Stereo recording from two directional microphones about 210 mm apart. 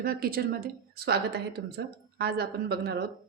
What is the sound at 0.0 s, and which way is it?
A woman's voice, 45° right (ahead or behind).